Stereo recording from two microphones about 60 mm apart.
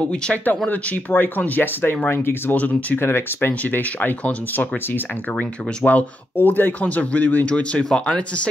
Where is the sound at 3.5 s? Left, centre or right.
Left.